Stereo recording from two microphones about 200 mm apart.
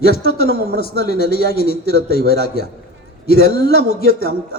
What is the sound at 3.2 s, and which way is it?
A man's voice, 50° left (ahead or behind).